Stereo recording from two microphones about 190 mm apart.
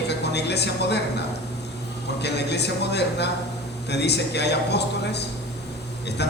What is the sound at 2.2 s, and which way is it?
A man's voice, 60° left (ahead or behind).